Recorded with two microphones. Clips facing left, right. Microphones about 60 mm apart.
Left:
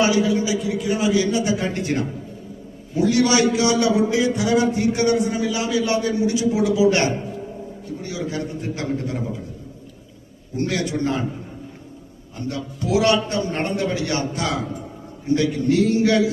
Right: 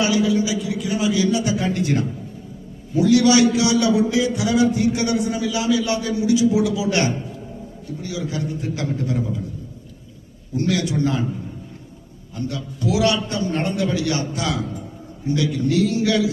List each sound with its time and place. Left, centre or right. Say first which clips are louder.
0.0 s a man's voice: even; left
10.7 s a man's voice: right 2 dB; left
12.5 s a man's voice: left 1 dB; left